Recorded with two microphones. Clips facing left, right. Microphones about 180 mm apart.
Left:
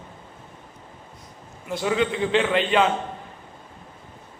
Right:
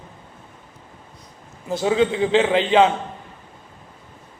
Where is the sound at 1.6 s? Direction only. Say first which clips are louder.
Right 4 dB; 30° right (ahead or behind).